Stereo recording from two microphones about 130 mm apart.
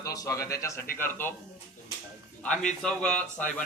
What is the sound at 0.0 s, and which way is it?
Speech, 25° left (ahead or behind).